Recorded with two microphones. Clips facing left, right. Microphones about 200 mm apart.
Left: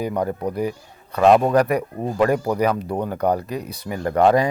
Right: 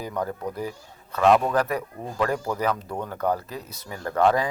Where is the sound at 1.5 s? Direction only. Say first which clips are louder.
Left 6 dB; 15° left (ahead or behind).